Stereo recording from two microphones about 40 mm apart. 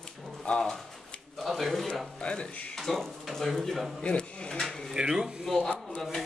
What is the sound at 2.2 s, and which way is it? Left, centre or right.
Speech, left.